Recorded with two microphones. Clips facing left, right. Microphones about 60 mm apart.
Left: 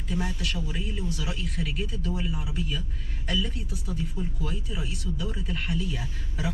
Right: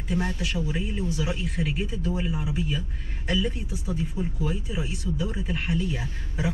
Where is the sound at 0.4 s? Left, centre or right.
Centre.